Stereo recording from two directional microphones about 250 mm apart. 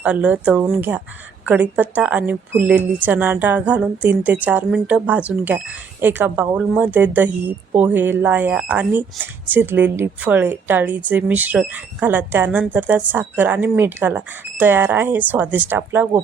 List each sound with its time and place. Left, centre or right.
0.0 s a woman's voice: centre